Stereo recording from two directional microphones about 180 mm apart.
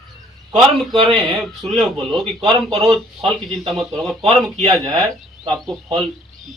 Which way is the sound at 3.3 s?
Centre (ahead or behind).